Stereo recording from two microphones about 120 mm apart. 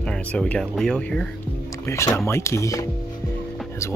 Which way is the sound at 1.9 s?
25° left (ahead or behind).